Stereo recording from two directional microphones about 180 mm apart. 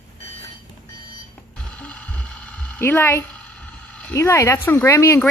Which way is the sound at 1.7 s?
10° left (ahead or behind).